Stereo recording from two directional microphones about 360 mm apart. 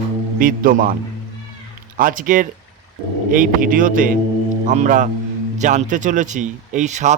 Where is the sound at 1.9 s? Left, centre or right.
Right.